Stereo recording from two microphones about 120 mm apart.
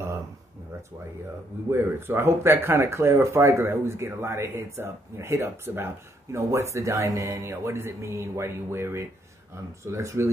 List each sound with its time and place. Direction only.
1.7 s speech: 20° right (ahead or behind)